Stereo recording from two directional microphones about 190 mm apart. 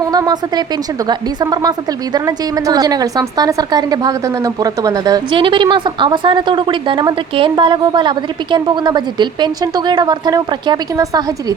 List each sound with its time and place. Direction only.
0.1 s a woman's voice: 20° right (ahead or behind)